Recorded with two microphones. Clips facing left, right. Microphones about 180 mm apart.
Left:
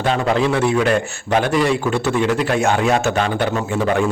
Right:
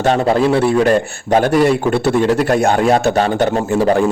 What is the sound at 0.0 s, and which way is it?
A man's voice, 40° right (ahead or behind).